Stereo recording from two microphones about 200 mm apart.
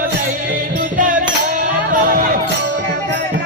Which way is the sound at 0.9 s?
40° right (ahead or behind).